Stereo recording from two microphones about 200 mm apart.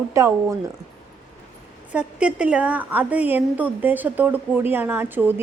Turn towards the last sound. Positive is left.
turn(degrees=-10)  # may be behind; listen again after turning